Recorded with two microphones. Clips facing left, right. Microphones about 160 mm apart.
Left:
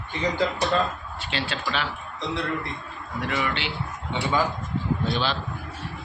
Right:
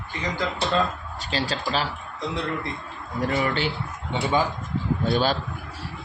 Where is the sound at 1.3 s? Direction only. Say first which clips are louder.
Right 3 dB; 40° right (ahead or behind).